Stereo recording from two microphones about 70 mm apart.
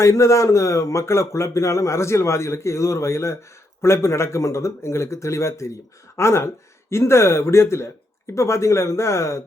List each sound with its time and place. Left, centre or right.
0.0 s speech: left